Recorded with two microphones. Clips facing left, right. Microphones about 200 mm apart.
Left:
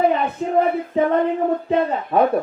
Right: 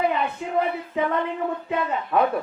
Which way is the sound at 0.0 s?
45° left (ahead or behind).